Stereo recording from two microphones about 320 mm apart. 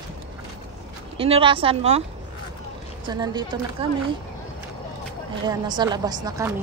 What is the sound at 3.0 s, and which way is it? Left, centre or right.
Speech, centre.